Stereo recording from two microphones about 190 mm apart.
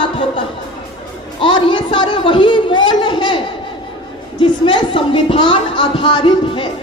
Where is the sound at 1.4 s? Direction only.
25° left (ahead or behind).